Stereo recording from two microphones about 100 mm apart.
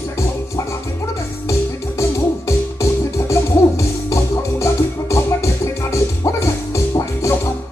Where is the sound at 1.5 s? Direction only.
30° left (ahead or behind).